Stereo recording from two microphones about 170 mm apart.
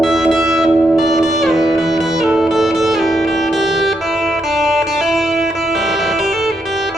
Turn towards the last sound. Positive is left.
turn(degrees=0)  # may be behind; listen again after turning